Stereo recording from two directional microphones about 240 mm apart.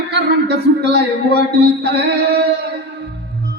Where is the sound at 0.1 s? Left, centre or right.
Right.